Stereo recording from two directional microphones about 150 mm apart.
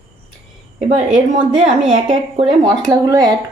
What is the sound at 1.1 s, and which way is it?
Speech, 5° right (ahead or behind).